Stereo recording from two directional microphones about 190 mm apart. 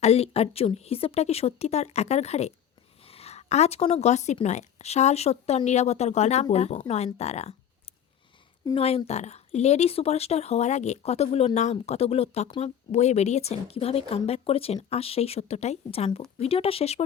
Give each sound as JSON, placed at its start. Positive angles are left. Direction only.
{"t": 0.0, "sound": "speech", "side_deg": 35}
{"t": 8.7, "sound": "speech", "side_deg": 30}